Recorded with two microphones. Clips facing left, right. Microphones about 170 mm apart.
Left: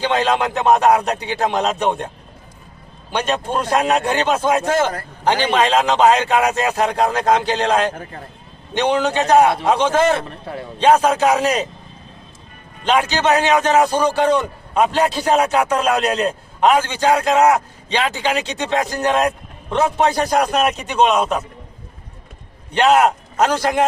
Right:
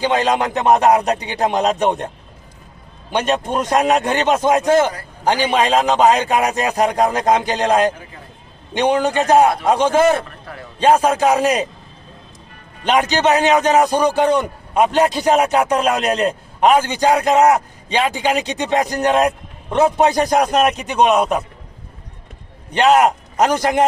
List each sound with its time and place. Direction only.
0.0 s a man's voice: 15° right (ahead or behind)
3.1 s a man's voice: 15° right (ahead or behind)
10.2 s a man's voice: 25° left (ahead or behind)
10.8 s a man's voice: 10° right (ahead or behind)
13.0 s a man's voice: 15° right (ahead or behind)
21.2 s a man's voice: 5° right (ahead or behind)
23.0 s a man's voice: 15° right (ahead or behind)